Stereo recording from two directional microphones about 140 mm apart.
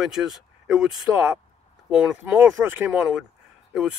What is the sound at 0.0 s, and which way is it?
Speech, centre (ahead or behind).